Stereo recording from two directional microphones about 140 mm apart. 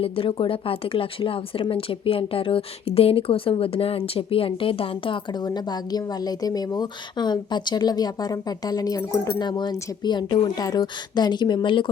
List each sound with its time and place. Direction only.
0.0 s speech: 40° left (ahead or behind)